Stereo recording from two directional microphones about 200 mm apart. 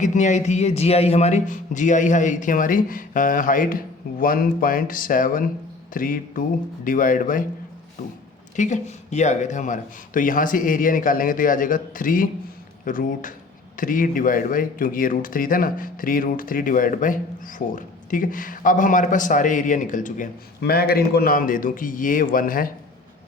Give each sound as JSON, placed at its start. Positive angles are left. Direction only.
{"t": 0.0, "sound": "speech", "side_deg": 40}
{"t": 8.5, "sound": "speech", "side_deg": 35}
{"t": 20.6, "sound": "speech", "side_deg": 50}